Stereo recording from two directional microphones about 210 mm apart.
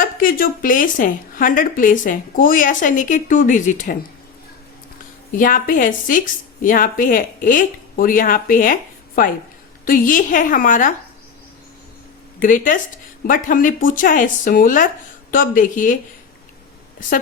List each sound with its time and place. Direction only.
0.0 s a woman's voice: 40° left (ahead or behind)
5.4 s a woman's voice: 40° left (ahead or behind)
12.4 s a woman's voice: 40° left (ahead or behind)